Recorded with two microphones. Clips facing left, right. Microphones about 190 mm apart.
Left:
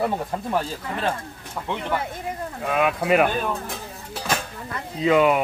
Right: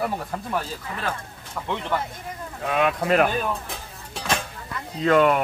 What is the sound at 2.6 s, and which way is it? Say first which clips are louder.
Speech: left 1 dB; 5° left (ahead or behind).